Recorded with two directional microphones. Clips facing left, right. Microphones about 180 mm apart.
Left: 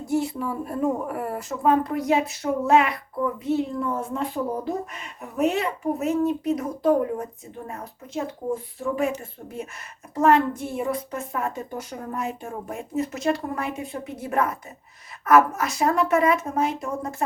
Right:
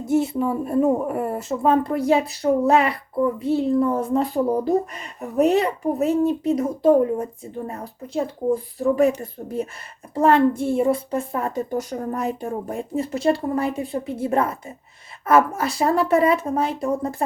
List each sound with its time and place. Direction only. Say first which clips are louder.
0.0 s a woman's voice: right 5 dB; 20° right (ahead or behind)